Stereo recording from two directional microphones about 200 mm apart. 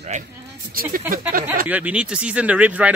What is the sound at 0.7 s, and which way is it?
Speech, 45° right (ahead or behind).